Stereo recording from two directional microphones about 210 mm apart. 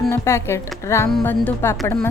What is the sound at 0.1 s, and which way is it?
A woman's voice, 15° left (ahead or behind).